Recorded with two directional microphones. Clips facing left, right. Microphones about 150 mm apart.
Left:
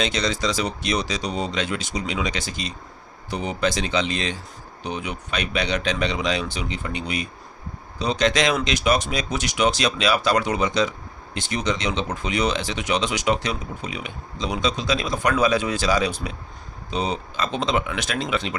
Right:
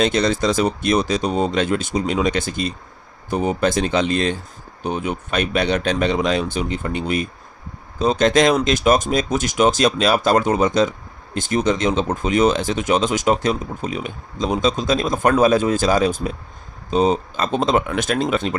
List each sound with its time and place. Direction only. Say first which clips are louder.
0.0 s speech: right 6 dB; 50° right (ahead or behind)